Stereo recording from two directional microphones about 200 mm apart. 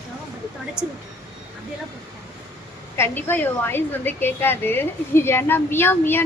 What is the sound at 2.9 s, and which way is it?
A woman's voice, 10° left (ahead or behind).